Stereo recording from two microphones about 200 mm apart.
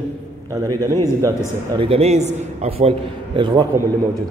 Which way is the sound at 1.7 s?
30° right (ahead or behind).